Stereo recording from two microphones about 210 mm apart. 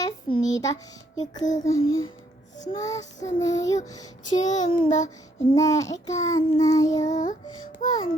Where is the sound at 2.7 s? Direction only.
15° left (ahead or behind).